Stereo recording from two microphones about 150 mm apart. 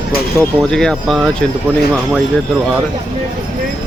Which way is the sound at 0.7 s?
5° left (ahead or behind).